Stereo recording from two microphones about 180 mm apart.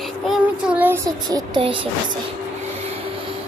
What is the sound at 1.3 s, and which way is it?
Speech, 25° right (ahead or behind).